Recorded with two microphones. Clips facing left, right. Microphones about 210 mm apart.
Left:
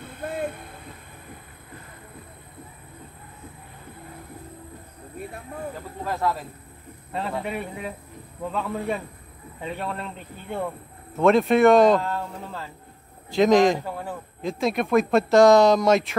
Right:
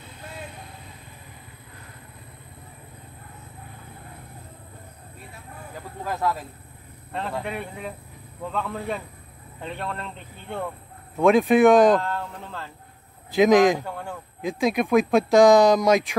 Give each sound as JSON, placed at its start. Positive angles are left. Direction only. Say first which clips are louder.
{"t": 0.0, "sound": "vehicle", "louder": "left 10 dB", "side_deg": 55}
{"t": 7.1, "sound": "speech", "louder": "left 1 dB", "side_deg": 5}